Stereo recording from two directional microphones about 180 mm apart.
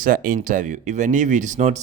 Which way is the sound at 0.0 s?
50° right (ahead or behind).